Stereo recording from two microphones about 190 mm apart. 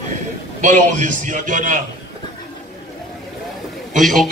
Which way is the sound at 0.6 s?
40° right (ahead or behind).